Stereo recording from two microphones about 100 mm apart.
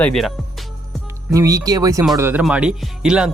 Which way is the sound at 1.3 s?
35° right (ahead or behind).